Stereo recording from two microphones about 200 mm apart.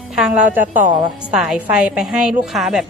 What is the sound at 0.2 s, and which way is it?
Speech, 5° right (ahead or behind).